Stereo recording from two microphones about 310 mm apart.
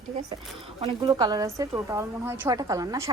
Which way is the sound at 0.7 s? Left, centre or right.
Centre.